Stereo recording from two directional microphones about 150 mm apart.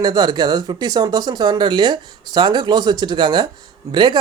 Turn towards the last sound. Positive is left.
turn(degrees=-30)  # may be behind; listen again after turning